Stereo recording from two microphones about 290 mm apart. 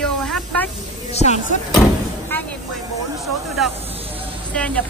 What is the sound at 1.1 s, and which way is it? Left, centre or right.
Speech, left.